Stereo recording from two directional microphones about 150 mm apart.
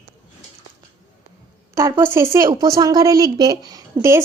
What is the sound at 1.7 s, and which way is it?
A woman's voice, 20° right (ahead or behind).